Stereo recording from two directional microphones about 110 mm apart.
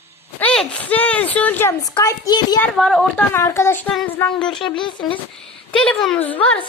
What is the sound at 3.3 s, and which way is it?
Speech, 25° left (ahead or behind).